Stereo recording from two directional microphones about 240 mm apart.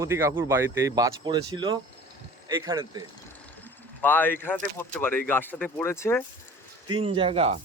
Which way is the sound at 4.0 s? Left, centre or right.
Centre.